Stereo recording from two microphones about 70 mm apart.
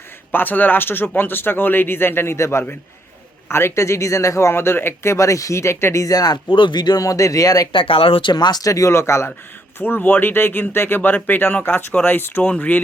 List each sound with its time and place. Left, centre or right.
0.3 s speech: left
5.1 s speech: left
7.0 s speech: left
8.3 s speech: left
8.7 s speech: left; by 12.8 s centre